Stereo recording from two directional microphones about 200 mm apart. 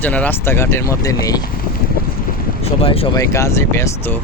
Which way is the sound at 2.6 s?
30° left (ahead or behind).